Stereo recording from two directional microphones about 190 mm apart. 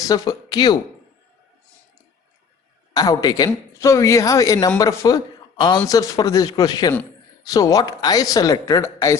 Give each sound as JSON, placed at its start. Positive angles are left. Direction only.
{"t": 0.0, "sound": "speech", "side_deg": 20}
{"t": 2.9, "sound": "a woman's voice", "side_deg": 20}